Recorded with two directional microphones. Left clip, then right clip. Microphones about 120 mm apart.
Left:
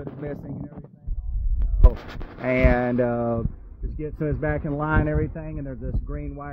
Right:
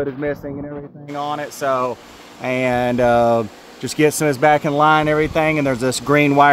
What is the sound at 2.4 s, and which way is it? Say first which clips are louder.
Speech: right 3 dB; 40° right (ahead or behind).